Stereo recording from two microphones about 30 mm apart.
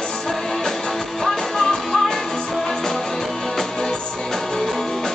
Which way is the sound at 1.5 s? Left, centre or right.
Centre.